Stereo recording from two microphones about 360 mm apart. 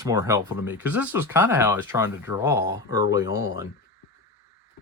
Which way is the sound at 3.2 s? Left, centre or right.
Left.